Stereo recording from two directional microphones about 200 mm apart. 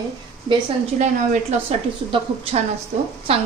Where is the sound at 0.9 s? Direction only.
35° right (ahead or behind).